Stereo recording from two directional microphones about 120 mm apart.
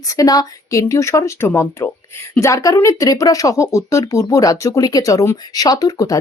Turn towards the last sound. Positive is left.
turn(degrees=30)  # may be behind; listen again after turning